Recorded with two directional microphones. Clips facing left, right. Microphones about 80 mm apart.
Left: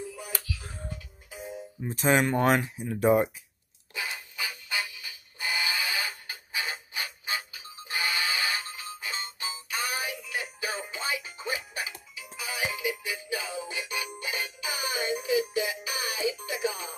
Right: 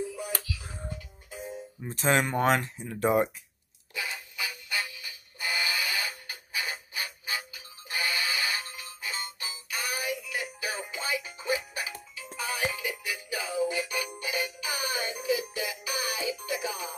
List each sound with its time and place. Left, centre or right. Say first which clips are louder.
1.9 s speech: left 2 dB; centre
3.9 s music: even; left